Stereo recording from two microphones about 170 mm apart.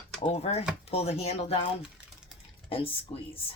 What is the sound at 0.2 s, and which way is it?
Speech, 35° left (ahead or behind).